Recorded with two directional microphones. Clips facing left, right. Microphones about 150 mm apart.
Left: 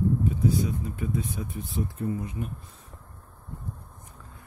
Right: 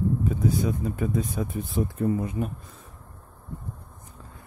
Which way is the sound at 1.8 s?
90° right.